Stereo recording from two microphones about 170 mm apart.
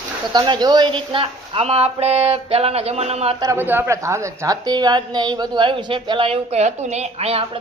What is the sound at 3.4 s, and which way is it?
A woman's voice, 15° right (ahead or behind).